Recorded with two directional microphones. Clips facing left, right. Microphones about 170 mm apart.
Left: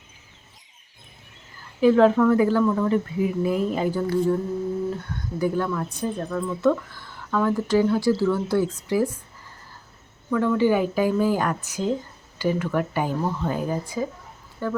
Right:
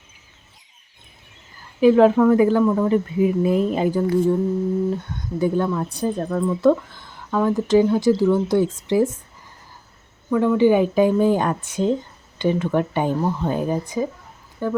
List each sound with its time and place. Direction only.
1.8 s speech: 15° right (ahead or behind)
5.4 s speech: 25° right (ahead or behind)
5.9 s speech: 35° right (ahead or behind)
6.9 s speech: 20° right (ahead or behind)
10.2 s speech: 15° right (ahead or behind)